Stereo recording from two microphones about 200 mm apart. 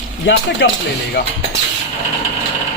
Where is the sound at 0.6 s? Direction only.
60° left (ahead or behind).